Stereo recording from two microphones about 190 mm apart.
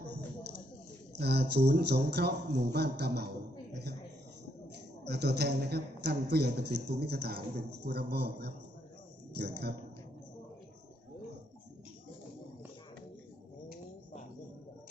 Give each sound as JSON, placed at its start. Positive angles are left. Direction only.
{"t": 1.2, "sound": "a man's voice", "side_deg": -60}
{"t": 5.0, "sound": "a man's voice", "side_deg": -60}